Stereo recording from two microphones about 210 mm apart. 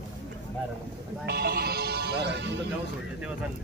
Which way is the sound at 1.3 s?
50° right (ahead or behind).